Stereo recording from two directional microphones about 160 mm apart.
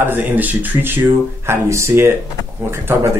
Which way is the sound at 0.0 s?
10° right (ahead or behind).